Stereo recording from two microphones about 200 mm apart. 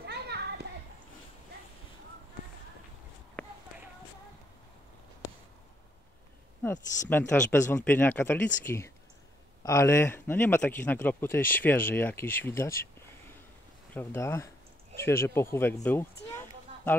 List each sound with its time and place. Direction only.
0.0 s children playing: 55° right (ahead or behind)
7.1 s a man's voice: 10° left (ahead or behind)
13.9 s a man's voice: 15° left (ahead or behind)
16.3 s a sound: 10° left (ahead or behind)